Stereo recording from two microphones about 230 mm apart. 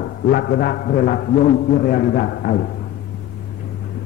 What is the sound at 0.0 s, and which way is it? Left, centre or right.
A man's voice, left.